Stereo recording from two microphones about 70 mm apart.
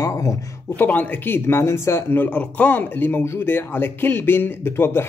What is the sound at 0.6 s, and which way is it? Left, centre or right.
Speech, left.